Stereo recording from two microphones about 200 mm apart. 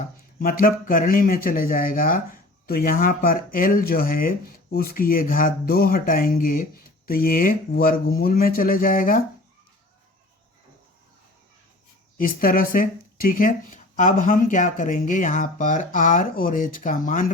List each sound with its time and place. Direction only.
0.3 s speech: 45° left (ahead or behind)
12.1 s speech: 45° left (ahead or behind)